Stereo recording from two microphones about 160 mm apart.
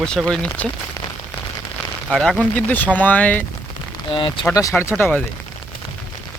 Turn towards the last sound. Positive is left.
turn(degrees=15)  # may be behind; listen again after turning